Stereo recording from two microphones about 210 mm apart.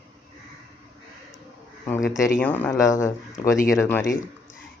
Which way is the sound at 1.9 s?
10° left (ahead or behind).